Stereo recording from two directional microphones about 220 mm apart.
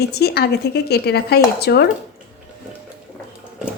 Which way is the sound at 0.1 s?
45° left (ahead or behind).